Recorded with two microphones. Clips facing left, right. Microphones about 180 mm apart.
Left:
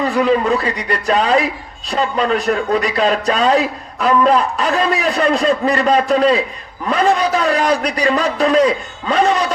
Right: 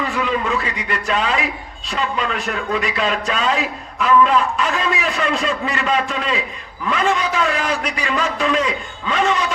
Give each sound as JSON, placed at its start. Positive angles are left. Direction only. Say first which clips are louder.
{"t": 0.0, "sound": "speech", "louder": "left 7 dB", "side_deg": 40}